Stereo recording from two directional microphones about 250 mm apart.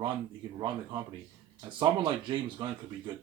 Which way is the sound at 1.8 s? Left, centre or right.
Centre.